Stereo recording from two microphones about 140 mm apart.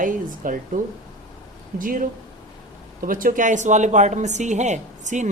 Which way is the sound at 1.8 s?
80° right.